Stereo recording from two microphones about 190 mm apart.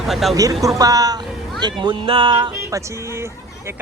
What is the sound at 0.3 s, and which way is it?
Speech, 20° right (ahead or behind).